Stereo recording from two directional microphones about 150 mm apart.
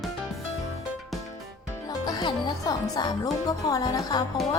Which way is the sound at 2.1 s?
30° left (ahead or behind).